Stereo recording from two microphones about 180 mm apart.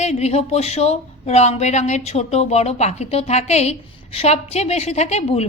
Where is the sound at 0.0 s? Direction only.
35° left (ahead or behind).